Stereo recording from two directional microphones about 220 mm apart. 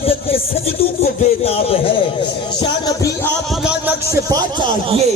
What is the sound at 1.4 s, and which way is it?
Speech, 25° left (ahead or behind).